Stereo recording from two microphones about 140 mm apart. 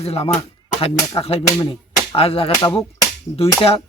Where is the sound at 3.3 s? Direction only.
20° left (ahead or behind).